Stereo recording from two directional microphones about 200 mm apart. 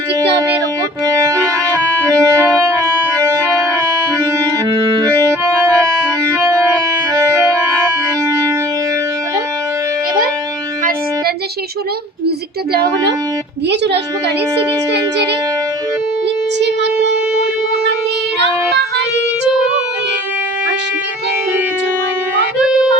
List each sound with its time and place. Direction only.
1.0 s music: 15° right (ahead or behind)
4.7 s music: 25° right (ahead or behind)
5.1 s music: 15° right (ahead or behind)
13.7 s a woman's voice: 60° right (ahead or behind)